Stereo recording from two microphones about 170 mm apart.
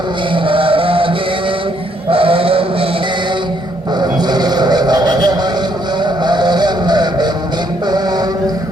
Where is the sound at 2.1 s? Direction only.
35° right (ahead or behind).